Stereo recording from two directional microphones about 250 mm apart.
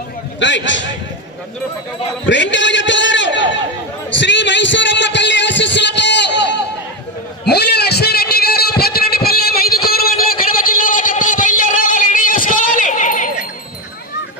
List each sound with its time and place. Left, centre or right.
0.3 s a man's voice: left
2.2 s a man's voice: left
7.4 s a sound: left